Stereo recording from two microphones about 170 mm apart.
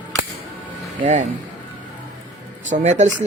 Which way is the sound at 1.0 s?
45° right (ahead or behind).